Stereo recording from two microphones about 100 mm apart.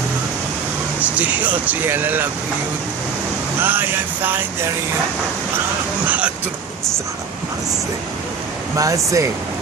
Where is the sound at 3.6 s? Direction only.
20° right (ahead or behind).